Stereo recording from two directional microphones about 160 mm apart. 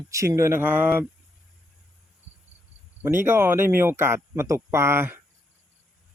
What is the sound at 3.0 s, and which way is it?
Speech, 15° right (ahead or behind).